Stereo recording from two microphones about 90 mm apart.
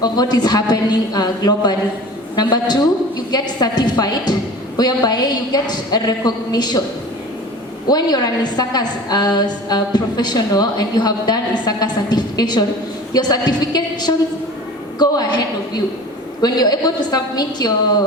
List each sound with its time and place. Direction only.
0.0 s a woman's voice: 50° left (ahead or behind)
7.9 s a woman's voice: 45° left (ahead or behind)